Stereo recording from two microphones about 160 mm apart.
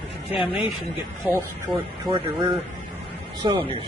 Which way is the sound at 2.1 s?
30° right (ahead or behind).